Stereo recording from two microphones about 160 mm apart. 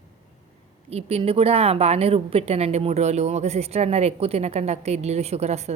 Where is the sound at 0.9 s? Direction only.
40° right (ahead or behind).